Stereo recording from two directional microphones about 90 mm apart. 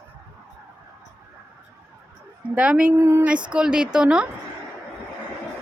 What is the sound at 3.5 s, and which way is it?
Speech, 10° right (ahead or behind).